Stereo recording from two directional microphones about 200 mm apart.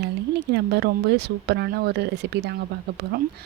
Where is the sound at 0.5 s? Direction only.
55° right (ahead or behind).